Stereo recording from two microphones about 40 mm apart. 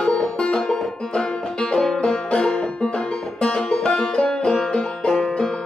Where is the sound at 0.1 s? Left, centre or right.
Left.